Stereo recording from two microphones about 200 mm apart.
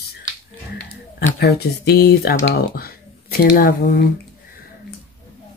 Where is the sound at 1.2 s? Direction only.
55° left (ahead or behind).